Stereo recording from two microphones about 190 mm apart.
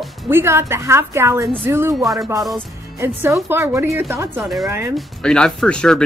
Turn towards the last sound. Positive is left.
turn(degrees=5)  # may be behind; listen again after turning